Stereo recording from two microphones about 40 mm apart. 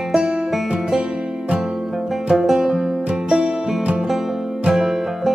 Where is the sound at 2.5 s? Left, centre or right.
Centre.